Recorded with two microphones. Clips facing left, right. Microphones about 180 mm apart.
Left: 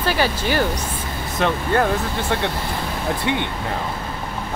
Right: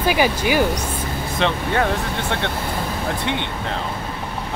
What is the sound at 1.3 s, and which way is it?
Speech, 5° left (ahead or behind).